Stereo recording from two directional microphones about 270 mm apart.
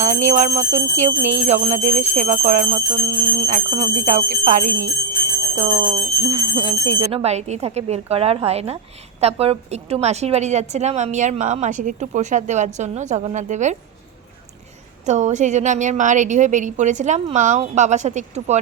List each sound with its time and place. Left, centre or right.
0.0 s a woman's voice: right
15.0 s a woman's voice: right